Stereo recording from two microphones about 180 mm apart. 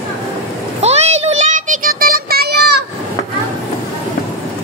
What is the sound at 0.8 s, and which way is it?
Music, 35° right (ahead or behind).